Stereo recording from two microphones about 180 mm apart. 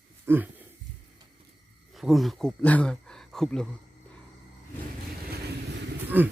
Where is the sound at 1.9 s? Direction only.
Centre (ahead or behind).